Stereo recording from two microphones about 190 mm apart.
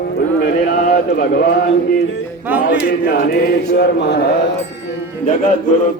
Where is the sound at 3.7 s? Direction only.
55° left (ahead or behind).